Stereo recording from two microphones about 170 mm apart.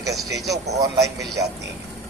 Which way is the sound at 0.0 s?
20° right (ahead or behind).